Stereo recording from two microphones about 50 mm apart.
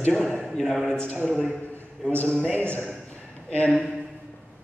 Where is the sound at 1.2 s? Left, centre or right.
Centre.